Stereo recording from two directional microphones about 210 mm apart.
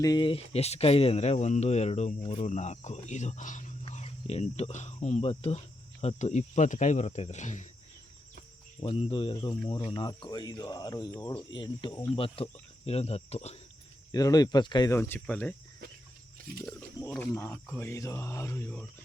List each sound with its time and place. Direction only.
0.0 s speech: 20° left (ahead or behind); by 7.7 s 35° left (ahead or behind)
8.8 s speech: 25° left (ahead or behind)
14.1 s speech: 15° left (ahead or behind)
16.6 s speech: 10° left (ahead or behind)